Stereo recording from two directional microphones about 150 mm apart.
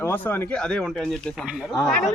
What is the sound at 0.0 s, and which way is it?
Speech, 15° left (ahead or behind).